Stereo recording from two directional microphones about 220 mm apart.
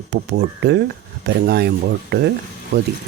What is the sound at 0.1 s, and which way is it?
Speech, 50° right (ahead or behind).